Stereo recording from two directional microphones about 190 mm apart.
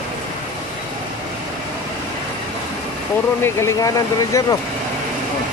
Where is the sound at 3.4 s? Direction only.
15° left (ahead or behind).